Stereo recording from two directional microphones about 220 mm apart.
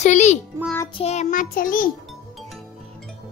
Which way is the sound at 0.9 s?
30° left (ahead or behind).